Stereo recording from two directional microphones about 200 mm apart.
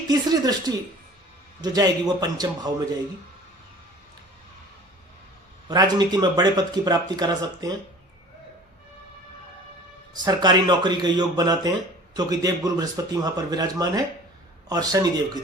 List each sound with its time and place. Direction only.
0.1 s speech: 20° right (ahead or behind)
5.6 s speech: 20° right (ahead or behind)
10.2 s speech: 20° right (ahead or behind)